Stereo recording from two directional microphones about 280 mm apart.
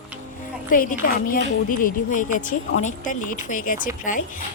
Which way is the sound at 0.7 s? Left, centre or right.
Left.